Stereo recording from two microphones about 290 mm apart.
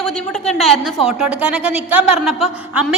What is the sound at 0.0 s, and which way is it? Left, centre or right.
A woman's voice, centre.